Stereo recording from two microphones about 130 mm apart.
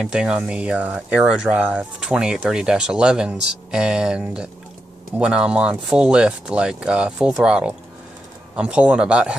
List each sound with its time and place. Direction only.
0.0 s speech: 5° right (ahead or behind)